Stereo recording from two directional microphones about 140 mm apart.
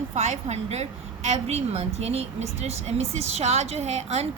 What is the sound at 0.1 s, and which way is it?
A woman's voice, 55° right (ahead or behind).